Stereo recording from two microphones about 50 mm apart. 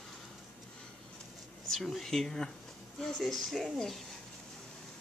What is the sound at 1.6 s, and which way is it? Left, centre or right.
Speech, centre.